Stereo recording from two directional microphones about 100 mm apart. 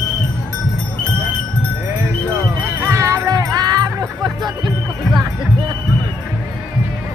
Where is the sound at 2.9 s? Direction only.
30° right (ahead or behind).